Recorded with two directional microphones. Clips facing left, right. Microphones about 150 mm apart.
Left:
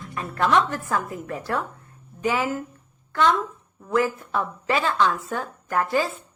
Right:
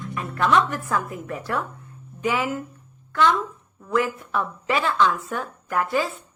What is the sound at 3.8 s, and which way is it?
Speech, 35° left (ahead or behind).